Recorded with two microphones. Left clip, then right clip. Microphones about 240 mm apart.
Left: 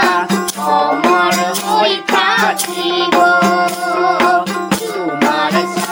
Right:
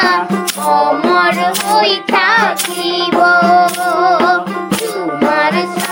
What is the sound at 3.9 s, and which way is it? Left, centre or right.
Music, right.